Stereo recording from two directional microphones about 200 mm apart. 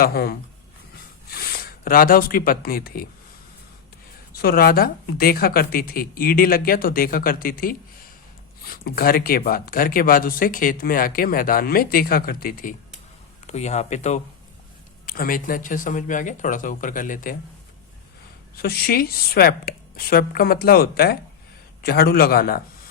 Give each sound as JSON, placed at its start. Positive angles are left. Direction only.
{"t": 0.0, "sound": "speech", "side_deg": 50}
{"t": 4.4, "sound": "speech", "side_deg": 50}
{"t": 13.5, "sound": "speech", "side_deg": 35}
{"t": 15.0, "sound": "speech", "side_deg": 45}
{"t": 18.5, "sound": "speech", "side_deg": 50}